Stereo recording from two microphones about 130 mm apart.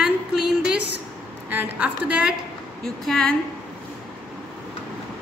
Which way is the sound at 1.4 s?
10° right (ahead or behind).